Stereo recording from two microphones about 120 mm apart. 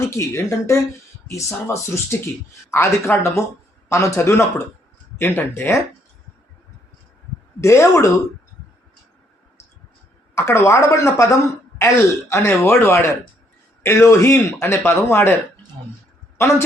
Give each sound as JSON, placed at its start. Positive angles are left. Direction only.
{"t": 0.0, "sound": "speech", "side_deg": 25}
{"t": 7.6, "sound": "speech", "side_deg": 25}
{"t": 10.3, "sound": "speech", "side_deg": 20}